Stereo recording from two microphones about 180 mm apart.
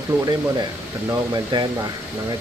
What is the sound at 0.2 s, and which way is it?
Speech, 20° right (ahead or behind).